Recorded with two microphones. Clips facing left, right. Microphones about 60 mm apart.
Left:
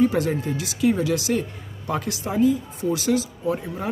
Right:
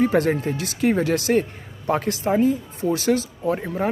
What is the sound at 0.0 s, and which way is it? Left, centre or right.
A man's voice, right.